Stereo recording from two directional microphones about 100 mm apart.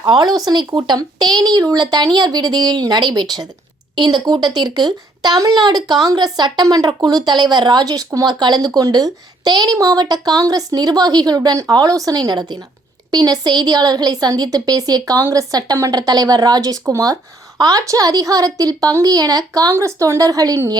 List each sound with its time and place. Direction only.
0.0 s a woman's voice: 45° right (ahead or behind)